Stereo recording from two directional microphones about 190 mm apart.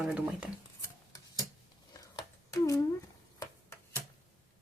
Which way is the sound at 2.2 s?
20° left (ahead or behind).